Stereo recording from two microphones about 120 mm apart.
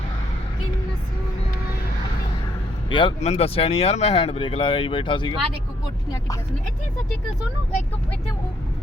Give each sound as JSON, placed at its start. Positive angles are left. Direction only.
{"t": 2.9, "sound": "speech", "side_deg": 45}
{"t": 3.2, "sound": "speech", "side_deg": 65}